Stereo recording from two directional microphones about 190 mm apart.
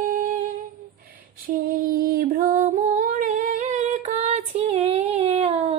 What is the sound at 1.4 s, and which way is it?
Female singing, 50° right (ahead or behind).